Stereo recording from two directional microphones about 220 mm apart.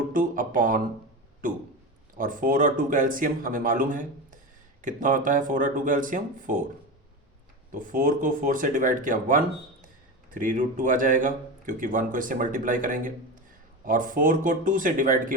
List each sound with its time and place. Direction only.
0.1 s a sound: 40° right (ahead or behind)
2.1 s speech: 40° right (ahead or behind)
7.7 s speech: 40° right (ahead or behind)